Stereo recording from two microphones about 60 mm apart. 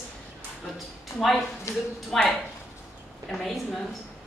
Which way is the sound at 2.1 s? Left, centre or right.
Centre.